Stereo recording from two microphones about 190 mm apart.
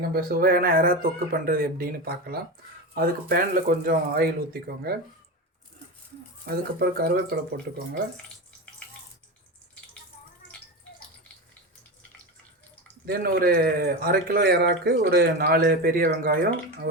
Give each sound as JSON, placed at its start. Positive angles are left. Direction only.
{"t": 0.0, "sound": "speech", "side_deg": -50}
{"t": 6.4, "sound": "speech", "side_deg": -55}
{"t": 13.1, "sound": "speech", "side_deg": -50}